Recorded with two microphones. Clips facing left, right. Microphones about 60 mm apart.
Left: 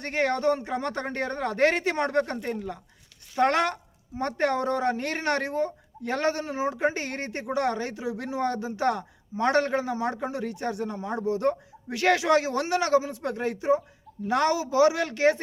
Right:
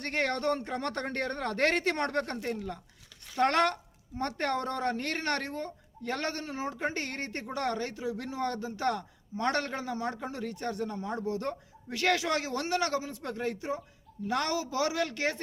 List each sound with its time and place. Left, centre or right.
0.0 s a man's voice: centre; by 15.4 s left